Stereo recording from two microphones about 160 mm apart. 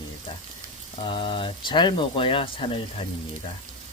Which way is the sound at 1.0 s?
30° left (ahead or behind).